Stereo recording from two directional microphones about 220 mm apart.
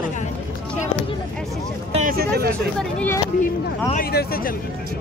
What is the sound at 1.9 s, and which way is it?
Speech, 40° right (ahead or behind).